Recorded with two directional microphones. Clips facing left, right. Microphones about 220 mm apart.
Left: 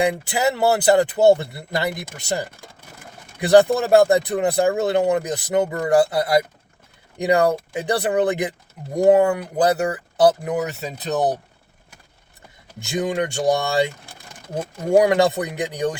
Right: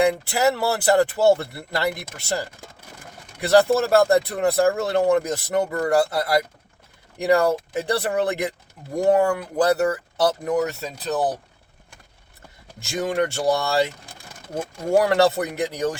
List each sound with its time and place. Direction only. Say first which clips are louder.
0.1 s speech: right 1 dB; 20° left (ahead or behind)
12.8 s speech: left 1 dB; 20° left (ahead or behind)
15.0 s speech: left 1 dB; 20° left (ahead or behind)